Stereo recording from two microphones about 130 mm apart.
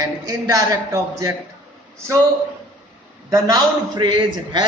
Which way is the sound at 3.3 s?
30° right (ahead or behind).